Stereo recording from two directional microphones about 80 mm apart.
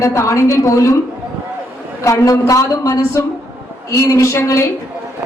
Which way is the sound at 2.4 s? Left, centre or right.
Left.